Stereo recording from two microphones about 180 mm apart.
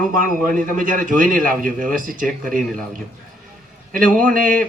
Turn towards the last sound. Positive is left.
turn(degrees=-50)  # may be behind; listen again after turning